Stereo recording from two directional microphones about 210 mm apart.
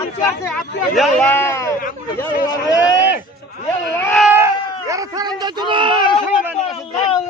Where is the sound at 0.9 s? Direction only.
5° left (ahead or behind).